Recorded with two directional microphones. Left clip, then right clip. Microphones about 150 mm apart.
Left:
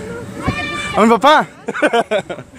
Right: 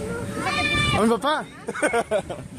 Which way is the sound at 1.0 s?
45° left (ahead or behind).